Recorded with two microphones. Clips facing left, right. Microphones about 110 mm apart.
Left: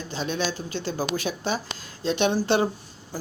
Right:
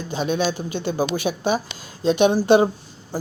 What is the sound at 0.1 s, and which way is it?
Speech, 15° right (ahead or behind).